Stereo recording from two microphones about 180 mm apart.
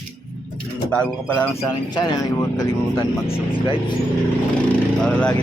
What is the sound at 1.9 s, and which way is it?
Speech, 25° left (ahead or behind).